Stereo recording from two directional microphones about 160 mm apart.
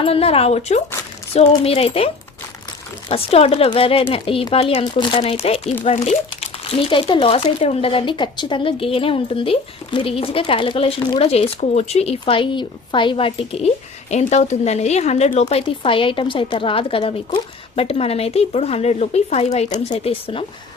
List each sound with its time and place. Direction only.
0.0 s speech: 40° left (ahead or behind)